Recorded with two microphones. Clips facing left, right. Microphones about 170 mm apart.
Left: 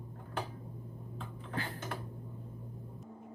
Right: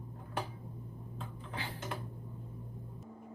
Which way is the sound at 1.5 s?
50° left (ahead or behind).